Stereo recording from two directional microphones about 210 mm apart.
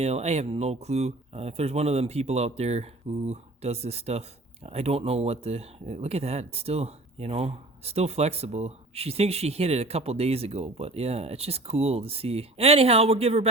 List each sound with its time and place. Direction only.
0.0 s speech: 30° right (ahead or behind)